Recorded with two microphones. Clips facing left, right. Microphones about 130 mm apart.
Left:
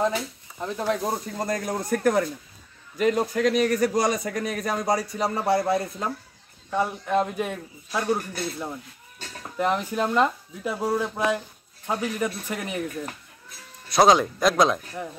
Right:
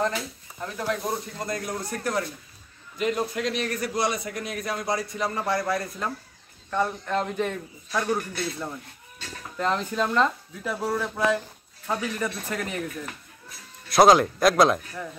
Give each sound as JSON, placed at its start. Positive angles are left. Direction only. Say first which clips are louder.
{"t": 0.0, "sound": "speech", "louder": "left 2 dB", "side_deg": 15}
{"t": 1.4, "sound": "a man's voice", "louder": "left 3 dB", "side_deg": 45}
{"t": 6.7, "sound": "speech", "louder": "left 2 dB", "side_deg": 10}
{"t": 13.8, "sound": "speech", "louder": "right 1 dB", "side_deg": 0}